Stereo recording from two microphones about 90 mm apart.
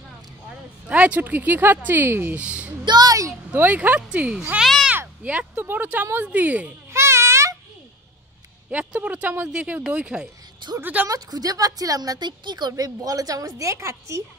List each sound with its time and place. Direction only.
0.8 s speech: 15° right (ahead or behind)
2.4 s a child's voice: 10° right (ahead or behind)
2.8 s a sound: 55° right (ahead or behind)
3.5 s speech: 20° right (ahead or behind); by 4.8 s centre (ahead or behind)
4.8 s a sound: 15° right (ahead or behind)
5.6 s speech: 20° right (ahead or behind)
6.9 s babbling: 30° right (ahead or behind)
8.6 s speech: 15° right (ahead or behind)
11.1 s a woman's voice: 45° right (ahead or behind)